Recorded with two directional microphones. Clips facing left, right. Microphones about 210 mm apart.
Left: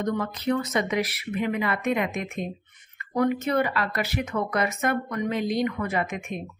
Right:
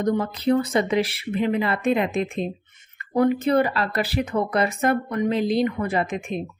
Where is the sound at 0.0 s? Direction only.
30° right (ahead or behind).